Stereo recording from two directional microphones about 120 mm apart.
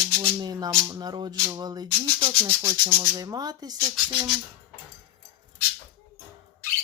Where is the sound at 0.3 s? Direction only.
35° right (ahead or behind).